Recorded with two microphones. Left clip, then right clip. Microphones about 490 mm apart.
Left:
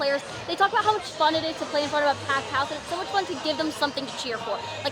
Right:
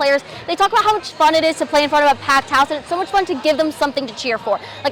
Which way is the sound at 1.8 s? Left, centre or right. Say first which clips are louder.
Right 9 dB; right.